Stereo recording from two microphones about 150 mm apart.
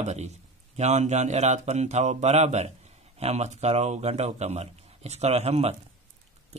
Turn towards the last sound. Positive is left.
turn(degrees=-45)  # may be behind; listen again after turning